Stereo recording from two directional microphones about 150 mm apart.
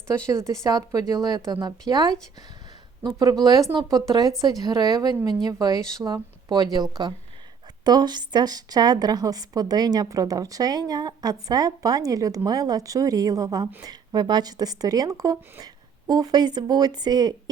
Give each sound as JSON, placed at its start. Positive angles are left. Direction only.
{"t": 0.3, "sound": "a woman's voice", "side_deg": -20}